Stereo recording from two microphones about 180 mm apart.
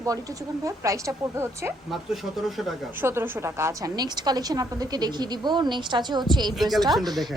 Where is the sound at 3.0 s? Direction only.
15° right (ahead or behind).